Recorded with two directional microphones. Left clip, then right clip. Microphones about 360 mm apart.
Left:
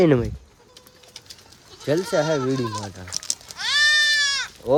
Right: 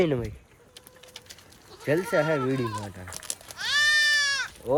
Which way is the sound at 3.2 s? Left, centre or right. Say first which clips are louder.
Left 8 dB; right.